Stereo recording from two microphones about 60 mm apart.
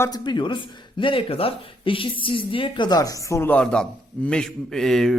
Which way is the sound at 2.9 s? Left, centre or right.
Left.